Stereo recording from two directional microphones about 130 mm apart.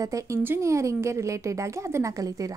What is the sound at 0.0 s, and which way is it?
A woman's voice, 25° right (ahead or behind).